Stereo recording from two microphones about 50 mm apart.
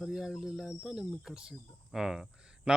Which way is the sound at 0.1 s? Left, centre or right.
Centre.